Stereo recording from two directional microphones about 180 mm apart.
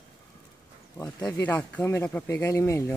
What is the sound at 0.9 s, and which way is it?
Speech, 20° left (ahead or behind).